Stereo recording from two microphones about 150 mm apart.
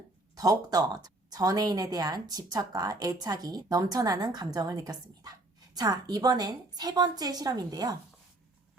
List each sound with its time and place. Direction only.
0.3 s speech: 25° right (ahead or behind)